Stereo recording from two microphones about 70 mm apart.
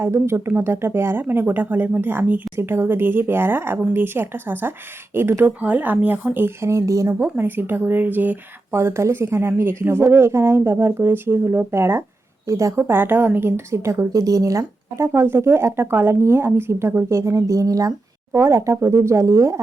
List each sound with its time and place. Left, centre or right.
0.0 s speech: right
5.5 s speech: right
6.6 s speech: right
7.1 s speech: right
8.8 s speech: right
12.5 s speech: right
12.9 s speech: right
14.6 s speech: right